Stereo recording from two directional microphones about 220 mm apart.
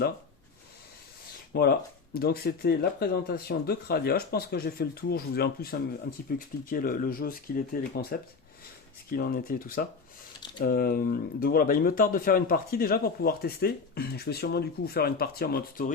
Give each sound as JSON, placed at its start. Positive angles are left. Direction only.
{"t": 1.5, "sound": "speech", "side_deg": 45}